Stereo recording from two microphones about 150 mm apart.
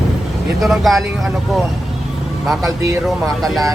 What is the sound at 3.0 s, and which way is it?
Speech, centre (ahead or behind).